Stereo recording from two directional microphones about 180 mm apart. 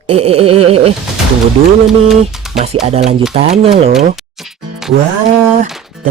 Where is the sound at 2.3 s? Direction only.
Centre (ahead or behind).